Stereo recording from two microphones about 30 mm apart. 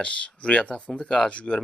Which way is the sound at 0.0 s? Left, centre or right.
Left.